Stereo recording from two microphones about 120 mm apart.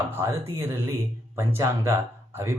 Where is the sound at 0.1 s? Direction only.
25° right (ahead or behind).